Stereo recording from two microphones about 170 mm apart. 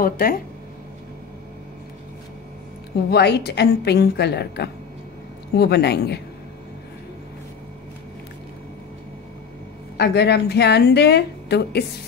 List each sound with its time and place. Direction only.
0.0 s speech: 60° left (ahead or behind)
3.1 s a woman's voice: 75° left (ahead or behind)
9.9 s a woman's voice: 75° left (ahead or behind)